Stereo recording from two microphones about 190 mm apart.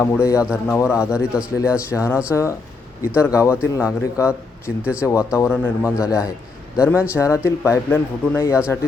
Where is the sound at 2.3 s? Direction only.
15° left (ahead or behind).